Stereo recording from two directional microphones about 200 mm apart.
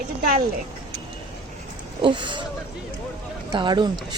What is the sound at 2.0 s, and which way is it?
Speech, 25° right (ahead or behind).